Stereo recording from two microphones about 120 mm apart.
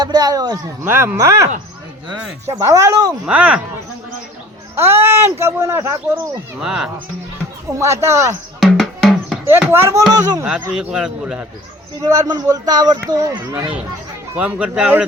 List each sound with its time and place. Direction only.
0.0 s speech: 35° right (ahead or behind)
0.9 s speech: 20° right (ahead or behind)
2.5 s speech: 25° right (ahead or behind)
3.2 s speech: 10° right (ahead or behind)
4.7 s speech: 20° right (ahead or behind)
6.6 s speech: 5° right (ahead or behind)
7.7 s speech: 25° right (ahead or behind)
8.6 s music: centre (ahead or behind)
9.5 s speech: 20° right (ahead or behind)
10.1 s speech: 35° right (ahead or behind)
10.4 s speech: 5° right (ahead or behind)
12.0 s speech: 30° right (ahead or behind)
14.3 s speech: 10° right (ahead or behind)